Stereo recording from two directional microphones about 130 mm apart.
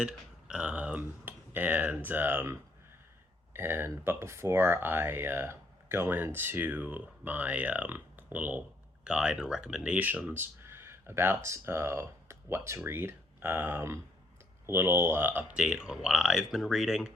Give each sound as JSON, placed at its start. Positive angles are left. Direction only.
{"t": 0.0, "sound": "speech", "side_deg": -5}